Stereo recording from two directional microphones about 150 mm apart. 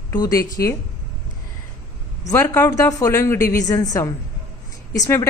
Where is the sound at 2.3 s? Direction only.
20° left (ahead or behind).